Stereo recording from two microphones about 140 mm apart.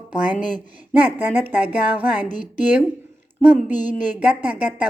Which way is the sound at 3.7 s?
65° left (ahead or behind).